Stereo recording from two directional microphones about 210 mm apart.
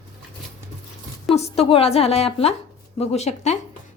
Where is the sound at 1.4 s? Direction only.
30° left (ahead or behind).